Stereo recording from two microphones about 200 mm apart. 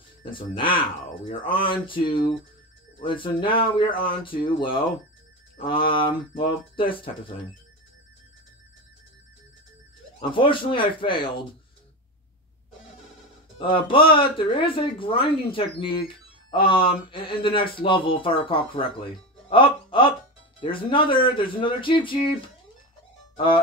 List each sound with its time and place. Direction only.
0.2 s speech: 25° left (ahead or behind)
10.3 s speech: 25° left (ahead or behind)
13.6 s speech: 25° left (ahead or behind)
23.3 s music: 25° left (ahead or behind)